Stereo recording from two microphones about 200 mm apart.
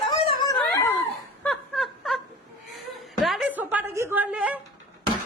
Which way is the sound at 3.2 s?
Centre (ahead or behind).